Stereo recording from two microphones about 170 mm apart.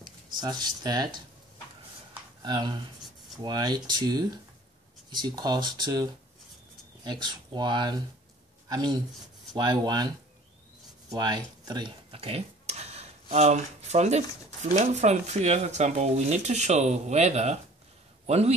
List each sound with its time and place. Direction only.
0.0 s speech: 25° right (ahead or behind)
2.4 s speech: 25° right (ahead or behind)
7.1 s speech: 25° right (ahead or behind)